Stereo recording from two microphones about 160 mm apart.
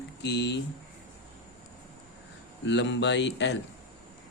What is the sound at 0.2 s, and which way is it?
Speech, 90° left.